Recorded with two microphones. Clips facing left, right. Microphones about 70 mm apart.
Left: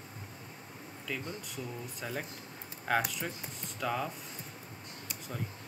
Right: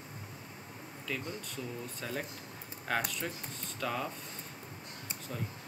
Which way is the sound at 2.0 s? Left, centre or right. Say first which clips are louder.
Left 1 dB; centre.